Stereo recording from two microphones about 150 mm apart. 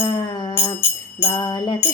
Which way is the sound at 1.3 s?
30° left (ahead or behind).